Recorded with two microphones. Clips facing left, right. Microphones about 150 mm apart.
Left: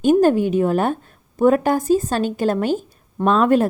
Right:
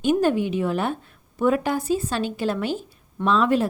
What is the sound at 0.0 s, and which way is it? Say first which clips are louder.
A woman's voice: left 6 dB; 45° left (ahead or behind).